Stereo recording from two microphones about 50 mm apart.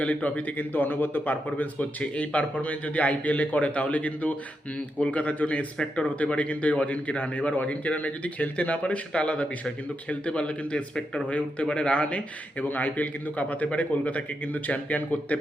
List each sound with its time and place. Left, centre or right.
0.0 s a man's voice: left
1.8 s a man's voice: left
5.7 s speech: centre
6.1 s a man's voice: left